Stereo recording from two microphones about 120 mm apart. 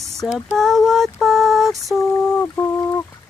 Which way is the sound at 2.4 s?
25° left (ahead or behind).